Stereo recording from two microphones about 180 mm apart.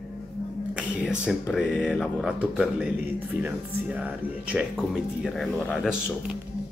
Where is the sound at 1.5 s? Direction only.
Centre (ahead or behind).